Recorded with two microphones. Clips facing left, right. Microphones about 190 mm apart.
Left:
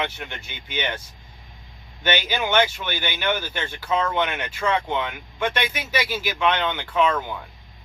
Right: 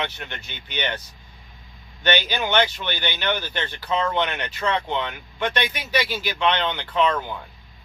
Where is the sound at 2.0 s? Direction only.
10° left (ahead or behind).